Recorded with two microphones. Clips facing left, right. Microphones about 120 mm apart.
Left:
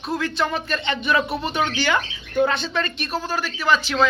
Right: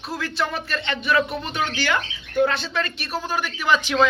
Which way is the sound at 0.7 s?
15° left (ahead or behind).